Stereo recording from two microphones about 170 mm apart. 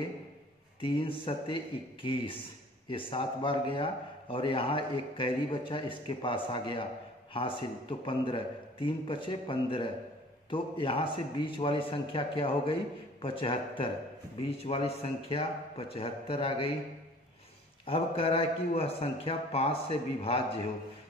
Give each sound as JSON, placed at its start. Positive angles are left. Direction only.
{"t": 0.7, "sound": "a man's voice", "side_deg": 30}
{"t": 17.8, "sound": "a man's voice", "side_deg": 35}